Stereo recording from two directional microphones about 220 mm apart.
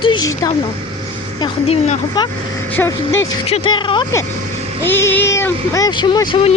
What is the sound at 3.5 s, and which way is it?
Speech, 20° left (ahead or behind).